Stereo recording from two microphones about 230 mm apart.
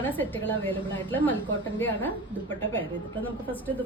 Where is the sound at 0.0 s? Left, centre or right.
Centre.